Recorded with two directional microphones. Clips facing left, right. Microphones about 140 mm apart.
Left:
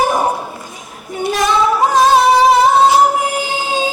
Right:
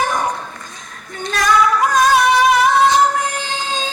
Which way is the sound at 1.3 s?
25° left (ahead or behind).